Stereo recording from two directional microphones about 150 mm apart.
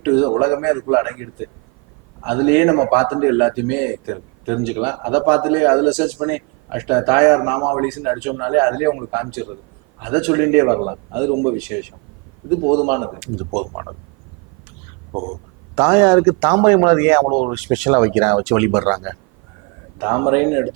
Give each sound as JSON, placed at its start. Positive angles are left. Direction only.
{"t": 0.0, "sound": "a man's voice", "side_deg": -10}
{"t": 2.2, "sound": "a man's voice", "side_deg": -10}
{"t": 15.7, "sound": "a man's voice", "side_deg": -10}